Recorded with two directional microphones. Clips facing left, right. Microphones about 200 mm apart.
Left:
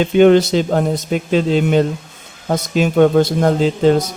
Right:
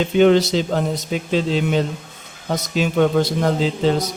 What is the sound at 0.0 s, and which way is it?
Speech, 55° left (ahead or behind).